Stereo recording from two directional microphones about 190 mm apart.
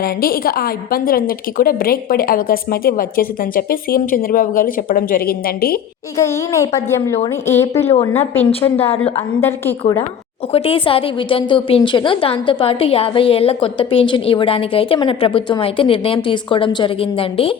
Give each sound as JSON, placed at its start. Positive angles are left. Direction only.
{"t": 0.0, "sound": "a woman's voice", "side_deg": 50}
{"t": 6.1, "sound": "a woman's voice", "side_deg": 15}
{"t": 7.5, "sound": "a woman's voice", "side_deg": 35}
{"t": 10.5, "sound": "a woman's voice", "side_deg": 30}